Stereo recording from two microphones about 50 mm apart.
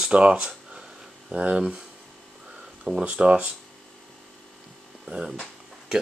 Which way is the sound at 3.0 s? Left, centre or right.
Right.